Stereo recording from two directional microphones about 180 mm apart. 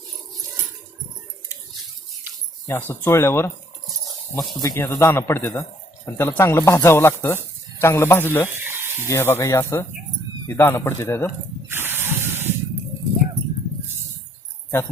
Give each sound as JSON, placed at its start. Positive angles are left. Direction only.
{"t": 2.6, "sound": "speech", "side_deg": 10}
{"t": 8.4, "sound": "a sound", "side_deg": -10}
{"t": 9.0, "sound": "speech", "side_deg": 15}
{"t": 11.7, "sound": "spray", "side_deg": -10}